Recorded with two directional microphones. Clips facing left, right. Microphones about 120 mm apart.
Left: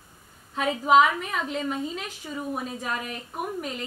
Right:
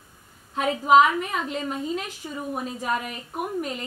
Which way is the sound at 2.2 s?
20° right (ahead or behind).